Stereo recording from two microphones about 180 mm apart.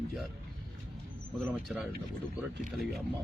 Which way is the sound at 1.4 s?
Centre (ahead or behind).